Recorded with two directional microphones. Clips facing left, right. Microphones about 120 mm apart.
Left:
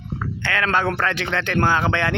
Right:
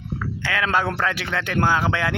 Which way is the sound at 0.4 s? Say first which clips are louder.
Left 1 dB; 5° right (ahead or behind).